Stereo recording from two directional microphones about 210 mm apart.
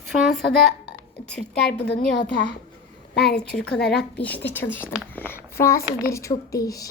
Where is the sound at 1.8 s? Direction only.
50° left (ahead or behind).